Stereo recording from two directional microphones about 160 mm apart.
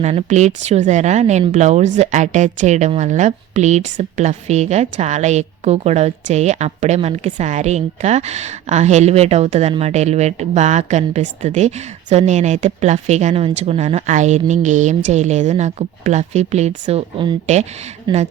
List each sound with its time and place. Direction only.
0.0 s a woman's voice: 45° right (ahead or behind)
18.1 s speech: 25° right (ahead or behind)